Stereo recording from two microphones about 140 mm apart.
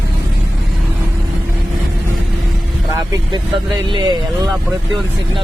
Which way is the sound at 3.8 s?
35° right (ahead or behind).